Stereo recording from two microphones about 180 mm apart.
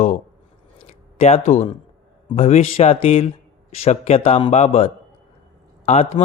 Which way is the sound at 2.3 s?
35° left (ahead or behind).